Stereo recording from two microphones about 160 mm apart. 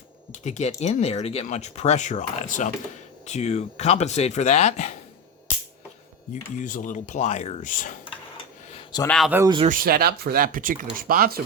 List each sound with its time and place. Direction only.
0.4 s speech: 45° left (ahead or behind)
6.3 s speech: 50° left (ahead or behind)
9.0 s speech: centre (ahead or behind)
9.6 s speech: 65° right (ahead or behind)